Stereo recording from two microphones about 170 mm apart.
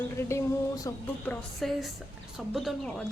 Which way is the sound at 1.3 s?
Centre (ahead or behind).